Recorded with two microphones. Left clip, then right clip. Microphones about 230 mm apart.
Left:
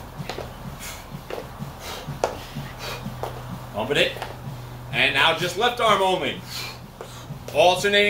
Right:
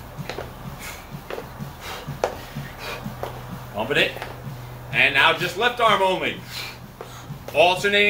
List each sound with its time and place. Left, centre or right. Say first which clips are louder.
2.2 s a sound: even; centre
3.8 s speech: even; centre
4.9 s a man's voice: right 2 dB; centre
7.5 s speech: even; centre